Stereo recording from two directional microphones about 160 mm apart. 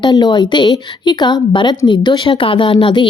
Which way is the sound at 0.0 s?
25° left (ahead or behind).